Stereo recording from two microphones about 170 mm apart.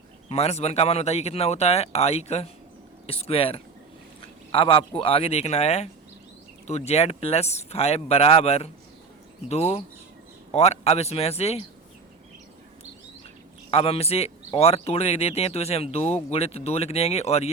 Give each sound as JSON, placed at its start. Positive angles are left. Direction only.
{"t": 0.3, "sound": "speech", "side_deg": 40}
{"t": 13.7, "sound": "speech", "side_deg": 35}